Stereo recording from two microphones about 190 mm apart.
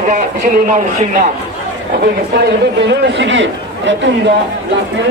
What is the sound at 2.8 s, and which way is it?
A man's voice, 65° right (ahead or behind).